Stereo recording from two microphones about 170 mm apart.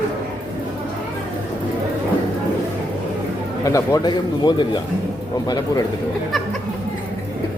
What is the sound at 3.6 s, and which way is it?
A man's voice, 20° left (ahead or behind).